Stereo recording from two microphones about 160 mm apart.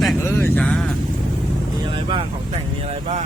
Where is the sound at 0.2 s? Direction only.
15° left (ahead or behind).